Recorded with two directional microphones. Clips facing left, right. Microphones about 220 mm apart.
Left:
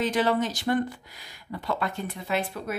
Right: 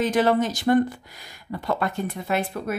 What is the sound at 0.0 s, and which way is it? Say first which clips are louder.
Speech: right 4 dB; 45° right (ahead or behind).